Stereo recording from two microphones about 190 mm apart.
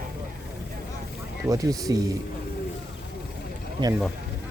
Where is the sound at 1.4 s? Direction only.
20° right (ahead or behind).